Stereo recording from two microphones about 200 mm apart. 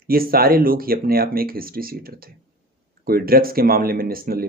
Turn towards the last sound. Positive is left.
turn(degrees=-45)  # may be behind; listen again after turning